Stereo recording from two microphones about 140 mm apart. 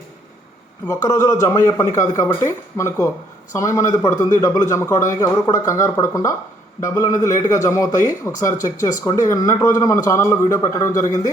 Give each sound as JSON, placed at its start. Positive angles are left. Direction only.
{"t": 0.9, "sound": "a man's voice", "side_deg": 25}